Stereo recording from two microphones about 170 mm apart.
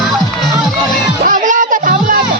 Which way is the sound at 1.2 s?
50° right (ahead or behind).